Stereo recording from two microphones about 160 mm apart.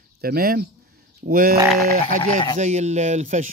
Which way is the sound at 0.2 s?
70° right (ahead or behind).